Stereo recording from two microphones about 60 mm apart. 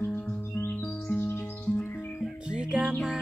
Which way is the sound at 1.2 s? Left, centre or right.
Left.